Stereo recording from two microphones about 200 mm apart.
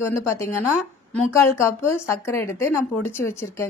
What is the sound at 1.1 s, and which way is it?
A woman's voice, 10° left (ahead or behind).